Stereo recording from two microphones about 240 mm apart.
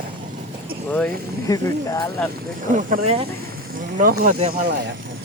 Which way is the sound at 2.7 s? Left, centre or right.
Right.